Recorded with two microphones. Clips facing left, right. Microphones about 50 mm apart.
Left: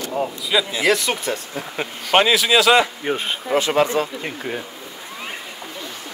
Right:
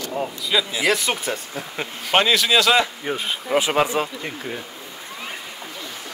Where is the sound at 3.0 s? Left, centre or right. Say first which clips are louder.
Left 3 dB; left.